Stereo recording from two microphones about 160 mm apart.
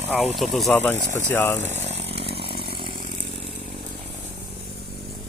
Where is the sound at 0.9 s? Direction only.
50° right (ahead or behind).